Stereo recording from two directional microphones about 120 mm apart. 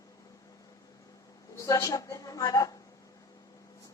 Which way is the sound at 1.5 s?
30° left (ahead or behind).